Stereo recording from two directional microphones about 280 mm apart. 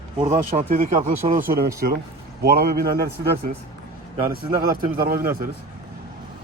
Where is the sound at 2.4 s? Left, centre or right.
Right.